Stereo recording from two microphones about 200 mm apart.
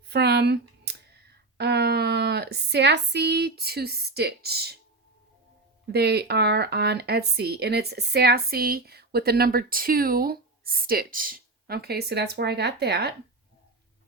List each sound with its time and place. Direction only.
0.1 s a sound: 55° right (ahead or behind)
1.5 s speech: 55° right (ahead or behind)
5.9 s speech: 55° right (ahead or behind)